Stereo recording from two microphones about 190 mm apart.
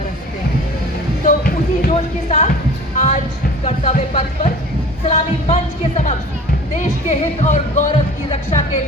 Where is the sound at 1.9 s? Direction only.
35° left (ahead or behind).